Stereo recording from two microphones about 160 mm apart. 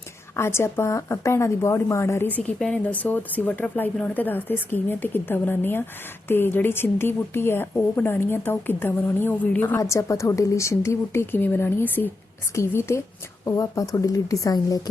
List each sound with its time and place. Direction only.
0.3 s a woman's voice: 15° left (ahead or behind)